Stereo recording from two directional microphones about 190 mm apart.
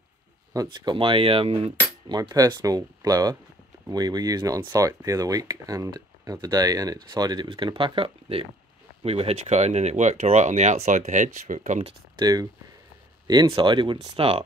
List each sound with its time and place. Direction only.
0.5 s speech: 20° right (ahead or behind); by 11.9 s 40° right (ahead or behind)
12.2 s speech: 20° right (ahead or behind)